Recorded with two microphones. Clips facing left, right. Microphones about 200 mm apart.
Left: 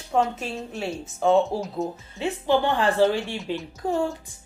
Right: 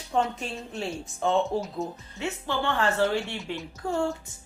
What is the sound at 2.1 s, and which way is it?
A woman's voice, 20° left (ahead or behind).